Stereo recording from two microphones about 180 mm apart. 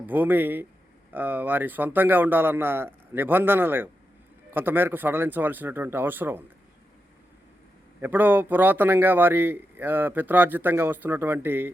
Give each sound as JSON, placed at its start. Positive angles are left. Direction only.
{"t": 0.0, "sound": "a man's voice", "side_deg": -10}
{"t": 8.0, "sound": "a man's voice", "side_deg": -10}